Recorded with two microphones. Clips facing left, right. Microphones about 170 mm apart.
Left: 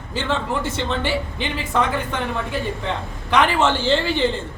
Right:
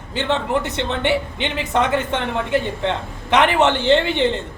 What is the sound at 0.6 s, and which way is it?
Speech, 65° right (ahead or behind).